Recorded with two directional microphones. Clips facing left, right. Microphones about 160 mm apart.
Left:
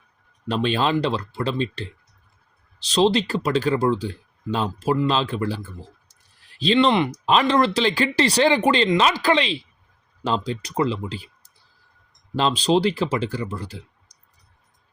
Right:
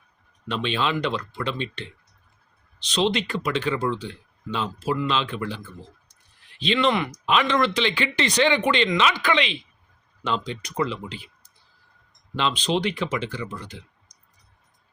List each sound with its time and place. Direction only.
0.4 s speech: 40° left (ahead or behind)
12.4 s speech: 40° left (ahead or behind)